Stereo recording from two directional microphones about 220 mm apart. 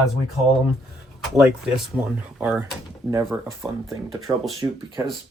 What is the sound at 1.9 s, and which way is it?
Speech, 10° right (ahead or behind).